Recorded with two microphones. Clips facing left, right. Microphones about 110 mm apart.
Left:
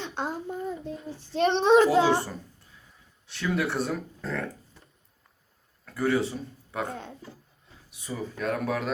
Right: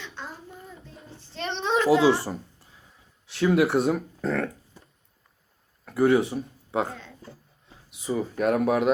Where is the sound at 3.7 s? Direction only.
65° right (ahead or behind).